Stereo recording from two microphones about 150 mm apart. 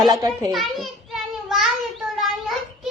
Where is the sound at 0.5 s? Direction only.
Centre (ahead or behind).